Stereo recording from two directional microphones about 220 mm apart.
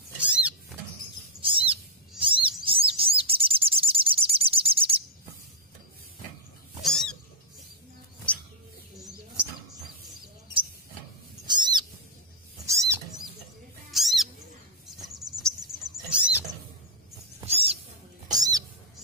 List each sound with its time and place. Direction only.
0.2 s cupboard open or close: 5° right (ahead or behind)
1.4 s bird: 25° right (ahead or behind)
6.8 s cat: centre (ahead or behind)
8.3 s bird: 5° left (ahead or behind)
11.4 s cat: 20° right (ahead or behind)
12.6 s a sound: 15° right (ahead or behind)
13.9 s bird: centre (ahead or behind)
14.9 s cricket: centre (ahead or behind)
16.1 s rodents: 5° right (ahead or behind)
17.4 s owl: 25° right (ahead or behind)
18.3 s cat: 15° right (ahead or behind)